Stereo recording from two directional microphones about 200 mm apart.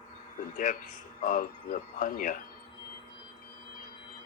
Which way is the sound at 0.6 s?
40° left (ahead or behind).